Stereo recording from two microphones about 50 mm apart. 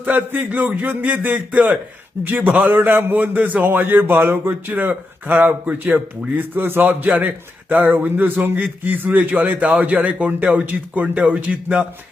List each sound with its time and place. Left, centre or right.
0.0 s a man's voice: right
2.6 s a man's voice: right